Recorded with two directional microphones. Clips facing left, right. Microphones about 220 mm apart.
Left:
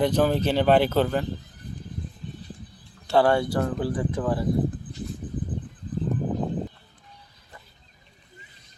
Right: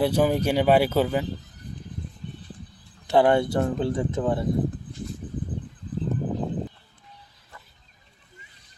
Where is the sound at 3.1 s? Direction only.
20° right (ahead or behind).